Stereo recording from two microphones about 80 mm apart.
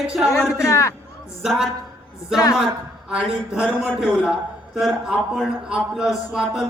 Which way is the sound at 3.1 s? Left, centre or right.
Centre.